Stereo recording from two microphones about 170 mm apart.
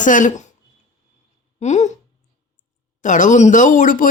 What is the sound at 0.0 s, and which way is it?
Speech, 50° left (ahead or behind).